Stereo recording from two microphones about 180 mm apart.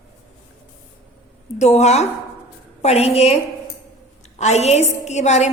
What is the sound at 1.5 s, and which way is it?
A woman's voice, 40° left (ahead or behind).